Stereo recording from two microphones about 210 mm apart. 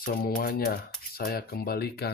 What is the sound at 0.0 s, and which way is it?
Speech, 45° left (ahead or behind).